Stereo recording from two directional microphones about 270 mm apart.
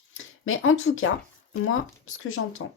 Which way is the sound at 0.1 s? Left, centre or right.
Left.